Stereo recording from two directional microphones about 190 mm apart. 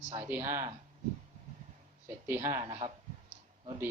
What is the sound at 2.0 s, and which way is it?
Speech, 15° right (ahead or behind).